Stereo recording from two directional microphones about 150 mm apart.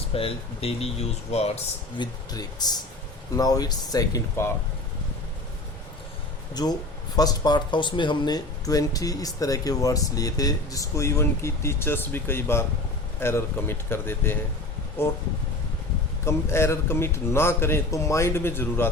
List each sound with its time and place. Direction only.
0.1 s speech: 40° left (ahead or behind)
2.0 s speech: 25° left (ahead or behind)
6.5 s a man's voice: 25° left (ahead or behind)
16.2 s a man's voice: 15° left (ahead or behind)